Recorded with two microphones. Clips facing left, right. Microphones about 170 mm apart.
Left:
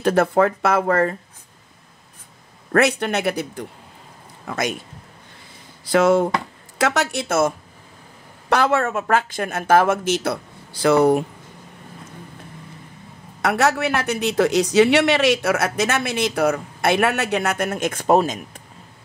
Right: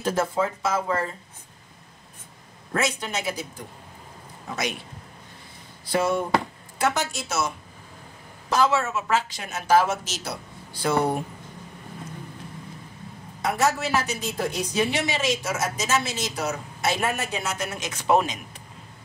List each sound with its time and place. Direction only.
0.0 s speech: 65° left (ahead or behind)
2.7 s speech: 65° left (ahead or behind)
4.5 s a man's voice: 50° left (ahead or behind)
5.9 s speech: 90° left
6.8 s speech: 75° left (ahead or behind); by 11.2 s 90° left
13.4 s speech: 70° left (ahead or behind); by 18.4 s 45° left (ahead or behind)